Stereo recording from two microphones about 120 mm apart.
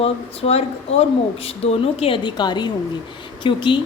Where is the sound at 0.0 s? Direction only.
60° left (ahead or behind).